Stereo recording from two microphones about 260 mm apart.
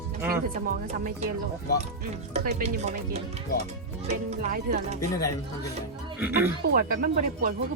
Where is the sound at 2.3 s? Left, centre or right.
Right.